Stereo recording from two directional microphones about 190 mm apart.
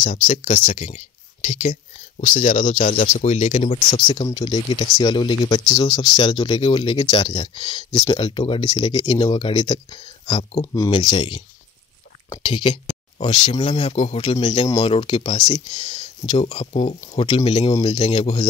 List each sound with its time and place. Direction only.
0.3 s speech: 40° left (ahead or behind)
4.1 s speech: 25° left (ahead or behind)
13.6 s speech: 35° left (ahead or behind)